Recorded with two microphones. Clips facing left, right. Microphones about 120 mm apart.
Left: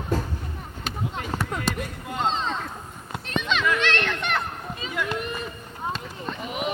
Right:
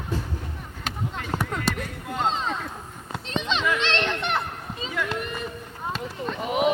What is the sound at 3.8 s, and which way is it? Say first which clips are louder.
Children playing: even; 20° right (ahead or behind).